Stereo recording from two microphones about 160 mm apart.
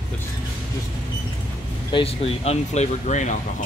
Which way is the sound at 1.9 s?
35° left (ahead or behind).